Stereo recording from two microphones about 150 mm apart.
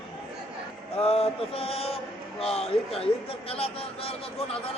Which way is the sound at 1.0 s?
40° left (ahead or behind).